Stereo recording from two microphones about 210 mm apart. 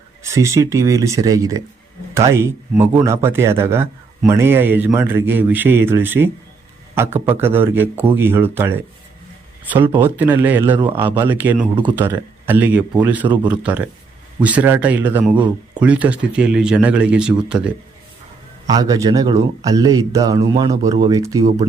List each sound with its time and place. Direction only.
0.2 s speech: 15° right (ahead or behind)
13.2 s speech: 20° right (ahead or behind)
13.6 s speech: 5° right (ahead or behind)
18.6 s speech: 15° right (ahead or behind)